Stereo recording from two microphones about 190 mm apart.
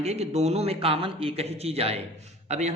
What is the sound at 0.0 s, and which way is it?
A man's voice, 35° right (ahead or behind).